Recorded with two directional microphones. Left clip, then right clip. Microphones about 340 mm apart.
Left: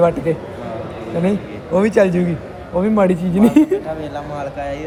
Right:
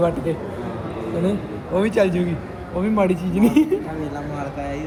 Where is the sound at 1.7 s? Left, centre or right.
Left.